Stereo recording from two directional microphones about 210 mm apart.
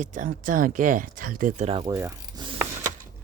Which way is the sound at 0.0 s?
35° right (ahead or behind).